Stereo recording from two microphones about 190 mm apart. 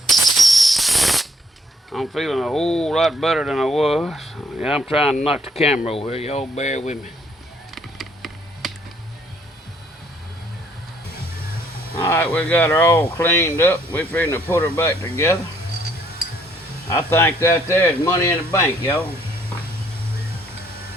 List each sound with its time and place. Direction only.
0.1 s a sound: centre (ahead or behind)
1.9 s speech: centre (ahead or behind)
5.8 s speech: 30° left (ahead or behind)
7.8 s a sound: centre (ahead or behind)
11.9 s speech: 15° left (ahead or behind)
16.9 s speech: 15° left (ahead or behind)